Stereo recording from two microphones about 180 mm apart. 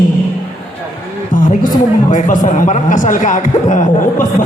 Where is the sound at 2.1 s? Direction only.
45° left (ahead or behind).